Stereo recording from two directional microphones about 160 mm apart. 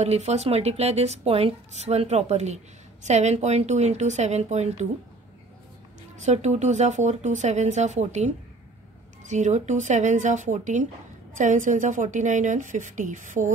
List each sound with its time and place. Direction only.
0.0 s speech: 40° right (ahead or behind)
6.1 s speech: 45° right (ahead or behind)